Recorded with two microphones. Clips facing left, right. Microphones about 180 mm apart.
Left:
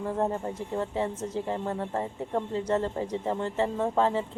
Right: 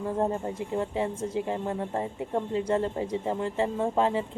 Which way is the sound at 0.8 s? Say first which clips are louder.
Even; 15° right (ahead or behind).